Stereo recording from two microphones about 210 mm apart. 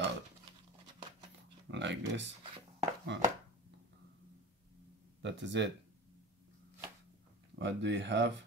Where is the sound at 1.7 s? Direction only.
60° right (ahead or behind).